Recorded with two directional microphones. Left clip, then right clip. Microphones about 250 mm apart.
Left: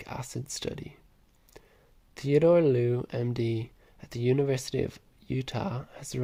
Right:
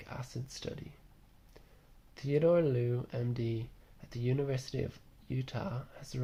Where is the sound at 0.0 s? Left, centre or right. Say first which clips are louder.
Left 7 dB; left.